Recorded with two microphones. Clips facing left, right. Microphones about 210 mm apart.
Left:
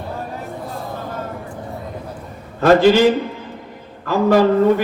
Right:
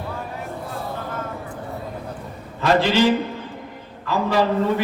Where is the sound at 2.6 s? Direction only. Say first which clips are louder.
Left 7 dB; 50° left (ahead or behind).